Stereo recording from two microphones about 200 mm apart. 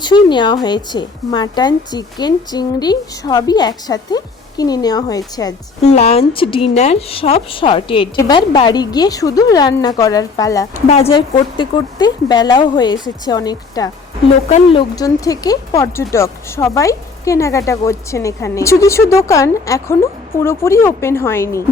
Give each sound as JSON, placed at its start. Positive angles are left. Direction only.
{"t": 0.0, "sound": "speech", "side_deg": 20}
{"t": 5.8, "sound": "speech", "side_deg": 35}
{"t": 10.8, "sound": "speech", "side_deg": 30}